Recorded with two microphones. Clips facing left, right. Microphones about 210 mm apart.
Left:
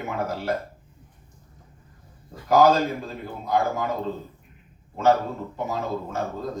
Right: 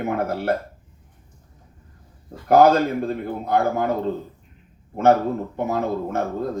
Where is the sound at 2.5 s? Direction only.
60° right (ahead or behind).